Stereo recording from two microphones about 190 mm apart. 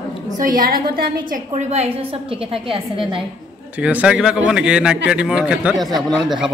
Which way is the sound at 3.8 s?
5° right (ahead or behind).